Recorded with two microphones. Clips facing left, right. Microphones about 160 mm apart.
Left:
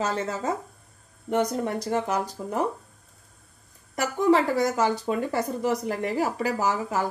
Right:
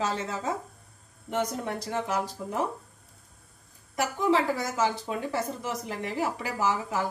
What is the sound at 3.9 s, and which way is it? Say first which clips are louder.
Speech: left 4 dB; 45° left (ahead or behind).